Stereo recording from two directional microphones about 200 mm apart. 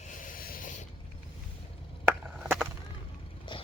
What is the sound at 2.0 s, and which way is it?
Chop, 5° right (ahead or behind).